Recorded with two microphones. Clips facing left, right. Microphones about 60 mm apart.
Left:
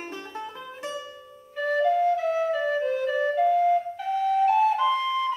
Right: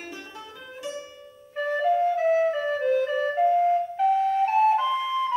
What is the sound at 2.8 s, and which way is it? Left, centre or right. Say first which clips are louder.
Music: right 2 dB; right.